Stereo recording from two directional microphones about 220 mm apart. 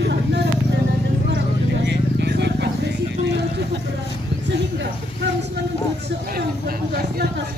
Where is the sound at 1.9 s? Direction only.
50° right (ahead or behind).